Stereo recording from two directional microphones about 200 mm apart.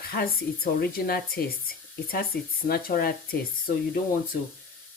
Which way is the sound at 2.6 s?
45° left (ahead or behind).